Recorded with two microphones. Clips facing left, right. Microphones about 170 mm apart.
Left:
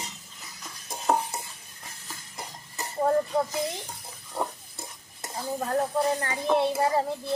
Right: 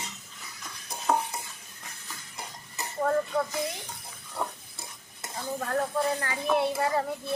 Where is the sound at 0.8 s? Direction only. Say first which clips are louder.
Left 1 dB; 25° left (ahead or behind).